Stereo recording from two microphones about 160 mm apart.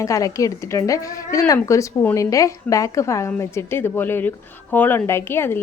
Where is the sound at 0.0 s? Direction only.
20° left (ahead or behind).